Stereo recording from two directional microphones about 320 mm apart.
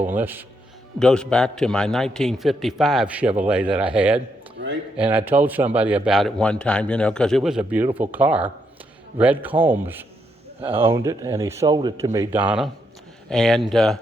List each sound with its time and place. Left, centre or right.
0.2 s speech: centre